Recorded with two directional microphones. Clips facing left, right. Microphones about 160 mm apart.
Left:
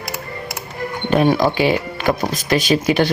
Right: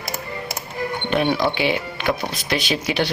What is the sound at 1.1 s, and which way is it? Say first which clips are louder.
Speech: left 5 dB; 40° left (ahead or behind).